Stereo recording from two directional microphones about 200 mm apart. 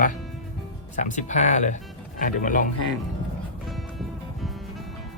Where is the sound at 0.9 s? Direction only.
40° left (ahead or behind).